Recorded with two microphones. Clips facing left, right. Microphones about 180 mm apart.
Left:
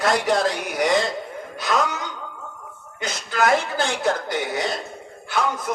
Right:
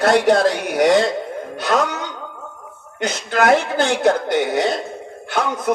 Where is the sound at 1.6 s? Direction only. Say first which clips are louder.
Right 3 dB; 60° right (ahead or behind).